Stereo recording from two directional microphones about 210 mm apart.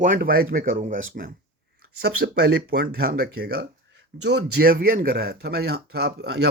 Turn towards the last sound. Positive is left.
turn(degrees=-50)  # may be behind; listen again after turning